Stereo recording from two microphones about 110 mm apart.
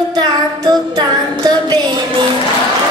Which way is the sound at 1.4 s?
40° right (ahead or behind).